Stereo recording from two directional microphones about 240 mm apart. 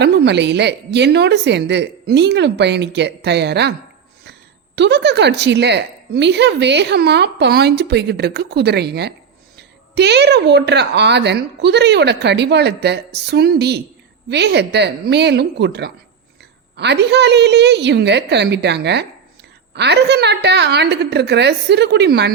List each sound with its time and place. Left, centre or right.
0.0 s speech: right